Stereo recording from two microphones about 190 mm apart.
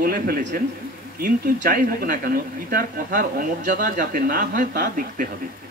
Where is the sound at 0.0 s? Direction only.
50° right (ahead or behind).